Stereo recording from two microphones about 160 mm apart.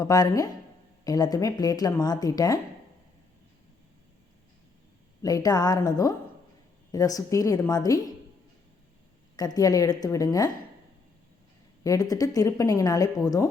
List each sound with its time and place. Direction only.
0.0 s a woman's voice: 20° left (ahead or behind)
5.2 s a woman's voice: 25° left (ahead or behind)
9.3 s a woman's voice: 25° left (ahead or behind)
11.8 s a woman's voice: 20° left (ahead or behind)